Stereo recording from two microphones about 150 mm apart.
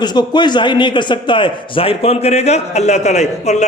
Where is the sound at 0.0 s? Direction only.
30° left (ahead or behind).